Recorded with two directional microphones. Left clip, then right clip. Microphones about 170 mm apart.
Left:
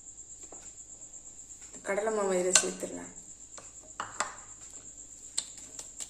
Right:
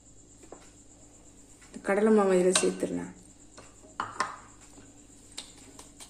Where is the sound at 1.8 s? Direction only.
60° right (ahead or behind).